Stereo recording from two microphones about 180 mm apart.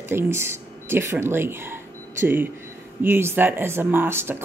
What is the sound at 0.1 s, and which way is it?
Speech, 15° right (ahead or behind).